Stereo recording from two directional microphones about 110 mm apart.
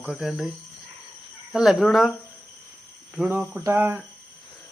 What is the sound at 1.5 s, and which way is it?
Speech, 5° right (ahead or behind).